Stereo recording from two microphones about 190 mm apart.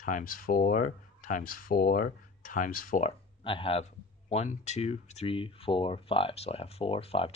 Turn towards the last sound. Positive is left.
turn(degrees=30)  # may be behind; listen again after turning